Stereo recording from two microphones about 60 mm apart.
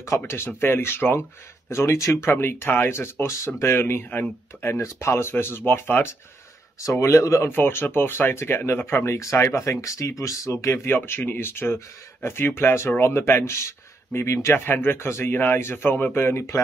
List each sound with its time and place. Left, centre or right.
0.1 s speech: left
1.7 s speech: left
2.3 s speech: left
6.8 s speech: left
7.4 s speech: left
15.3 s speech: left